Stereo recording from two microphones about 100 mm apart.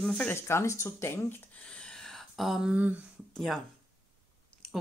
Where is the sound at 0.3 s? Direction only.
25° left (ahead or behind).